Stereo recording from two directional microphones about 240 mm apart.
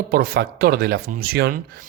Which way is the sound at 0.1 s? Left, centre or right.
Right.